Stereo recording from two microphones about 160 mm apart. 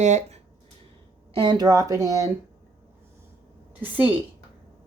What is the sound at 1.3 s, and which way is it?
Speech, 30° right (ahead or behind).